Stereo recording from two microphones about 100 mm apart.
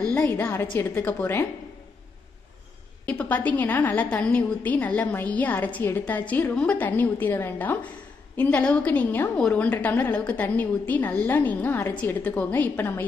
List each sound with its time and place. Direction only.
0.2 s a woman's voice: 20° left (ahead or behind)
3.1 s a woman's voice: 15° left (ahead or behind)